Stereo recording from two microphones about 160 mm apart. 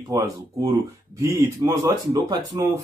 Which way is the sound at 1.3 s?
20° right (ahead or behind).